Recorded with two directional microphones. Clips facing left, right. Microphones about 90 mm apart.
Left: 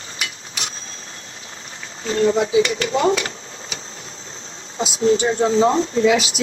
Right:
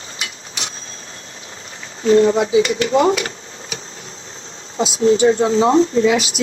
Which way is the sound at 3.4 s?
30° left (ahead or behind).